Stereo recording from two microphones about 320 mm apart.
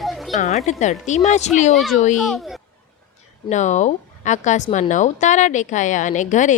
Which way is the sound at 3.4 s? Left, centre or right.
Left.